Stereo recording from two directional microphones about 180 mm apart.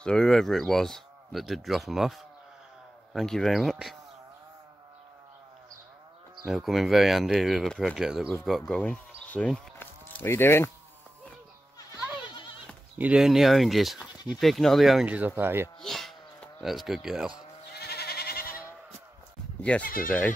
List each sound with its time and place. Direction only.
0.0 s speech: 5° left (ahead or behind)
6.4 s speech: centre (ahead or behind)
12.9 s speech: 5° right (ahead or behind)
15.8 s a sound: centre (ahead or behind)
17.7 s goat: 65° left (ahead or behind)
19.6 s speech: 5° left (ahead or behind)